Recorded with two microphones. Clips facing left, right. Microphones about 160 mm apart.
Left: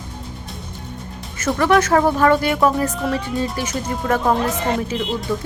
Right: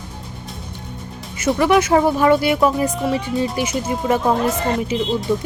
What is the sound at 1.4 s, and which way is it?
Speech, 10° right (ahead or behind).